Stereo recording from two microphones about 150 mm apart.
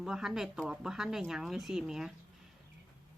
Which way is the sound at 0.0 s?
5° right (ahead or behind).